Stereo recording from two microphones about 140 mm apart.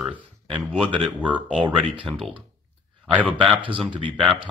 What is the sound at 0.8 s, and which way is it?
Speech, 35° right (ahead or behind).